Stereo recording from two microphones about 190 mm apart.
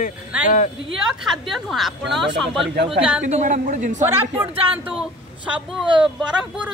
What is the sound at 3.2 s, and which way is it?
Speech, 40° right (ahead or behind).